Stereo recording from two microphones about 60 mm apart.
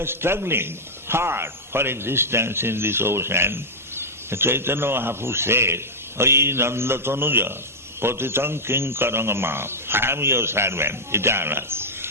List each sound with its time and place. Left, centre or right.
0.0 s a man's voice: right